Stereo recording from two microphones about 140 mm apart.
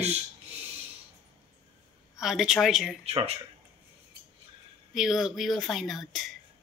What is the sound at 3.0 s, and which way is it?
Speech, 45° right (ahead or behind).